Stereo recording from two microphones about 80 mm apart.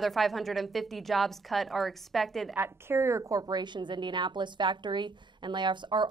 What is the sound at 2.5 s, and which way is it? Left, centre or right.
Speech, right.